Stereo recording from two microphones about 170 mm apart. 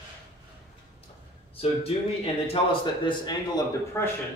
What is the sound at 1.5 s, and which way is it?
A man's voice, 35° left (ahead or behind).